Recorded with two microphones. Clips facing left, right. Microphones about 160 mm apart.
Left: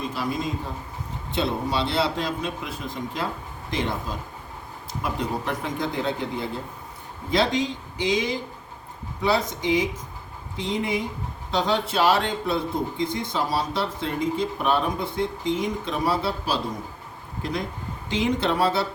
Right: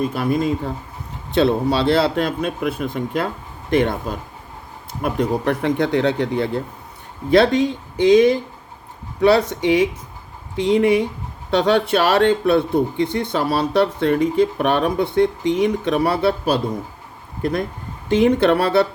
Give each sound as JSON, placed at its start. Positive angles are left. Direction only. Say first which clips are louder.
{"t": 0.0, "sound": "a man's voice", "louder": "right 8 dB", "side_deg": -55}
{"t": 18.1, "sound": "a man's voice", "louder": "right 9 dB", "side_deg": -60}